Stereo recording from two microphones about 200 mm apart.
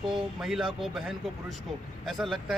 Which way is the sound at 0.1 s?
Centre (ahead or behind).